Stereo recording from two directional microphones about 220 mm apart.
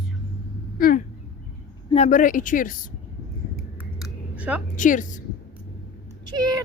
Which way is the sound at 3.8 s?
5° right (ahead or behind).